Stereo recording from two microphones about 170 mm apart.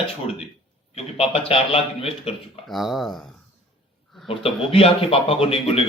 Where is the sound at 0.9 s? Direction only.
35° left (ahead or behind).